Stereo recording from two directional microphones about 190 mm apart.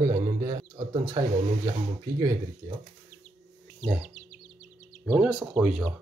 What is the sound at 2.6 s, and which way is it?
Speech, 15° right (ahead or behind).